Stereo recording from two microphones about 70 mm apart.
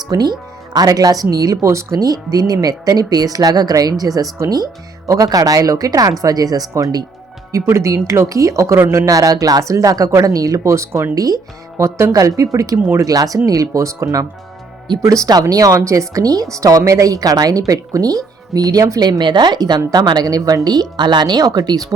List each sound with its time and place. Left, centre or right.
0.1 s a woman's voice: right
1.6 s speech: right
2.0 s a woman's voice: right
7.5 s a woman's voice: right
11.1 s a woman's voice: right
11.8 s a woman's voice: right
15.3 s a woman's voice: right